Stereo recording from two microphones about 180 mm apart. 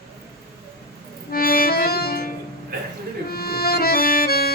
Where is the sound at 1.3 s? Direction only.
55° left (ahead or behind).